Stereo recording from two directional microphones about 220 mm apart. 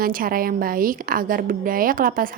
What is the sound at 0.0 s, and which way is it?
A woman's voice, 40° right (ahead or behind).